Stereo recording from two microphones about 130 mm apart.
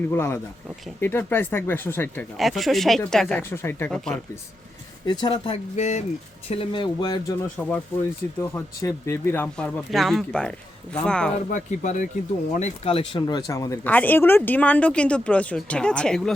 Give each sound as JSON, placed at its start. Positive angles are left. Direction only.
{"t": 0.1, "sound": "speech", "side_deg": 15}
{"t": 2.4, "sound": "speech", "side_deg": 0}
{"t": 3.9, "sound": "speech", "side_deg": 5}
{"t": 5.0, "sound": "speech", "side_deg": 35}
{"t": 5.7, "sound": "speech", "side_deg": 60}
{"t": 6.5, "sound": "speech", "side_deg": 45}
{"t": 7.5, "sound": "speech", "side_deg": 10}
{"t": 8.4, "sound": "speech", "side_deg": 20}
{"t": 11.5, "sound": "speech", "side_deg": 75}
{"t": 12.5, "sound": "speech", "side_deg": 55}
{"t": 13.8, "sound": "speech", "side_deg": 15}